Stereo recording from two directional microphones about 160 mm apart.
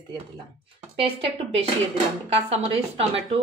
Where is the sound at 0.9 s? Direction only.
35° right (ahead or behind).